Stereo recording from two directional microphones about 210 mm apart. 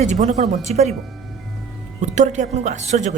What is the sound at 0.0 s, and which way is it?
Speech, 35° right (ahead or behind).